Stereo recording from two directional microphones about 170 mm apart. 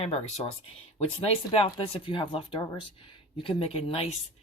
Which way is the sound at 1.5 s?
30° left (ahead or behind).